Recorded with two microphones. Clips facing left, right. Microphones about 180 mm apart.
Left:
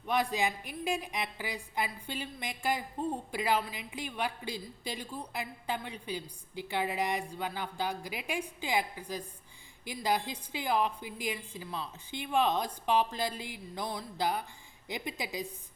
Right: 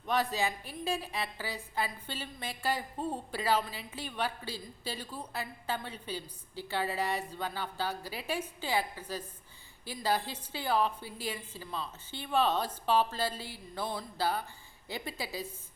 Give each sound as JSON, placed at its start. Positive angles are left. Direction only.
{"t": 0.0, "sound": "a woman's voice", "side_deg": 15}